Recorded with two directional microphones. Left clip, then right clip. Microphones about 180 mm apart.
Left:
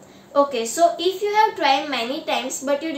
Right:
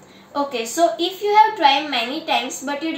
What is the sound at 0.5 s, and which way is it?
A woman's voice, 15° left (ahead or behind).